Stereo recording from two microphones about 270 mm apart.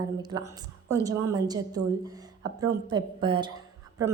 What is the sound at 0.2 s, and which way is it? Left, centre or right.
A woman's voice, centre.